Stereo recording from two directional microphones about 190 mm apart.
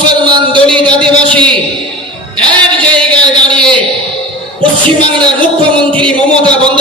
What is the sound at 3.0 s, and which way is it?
Speech, 5° left (ahead or behind).